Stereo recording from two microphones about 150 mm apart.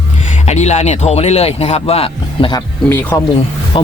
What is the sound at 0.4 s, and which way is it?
Speech, 50° left (ahead or behind).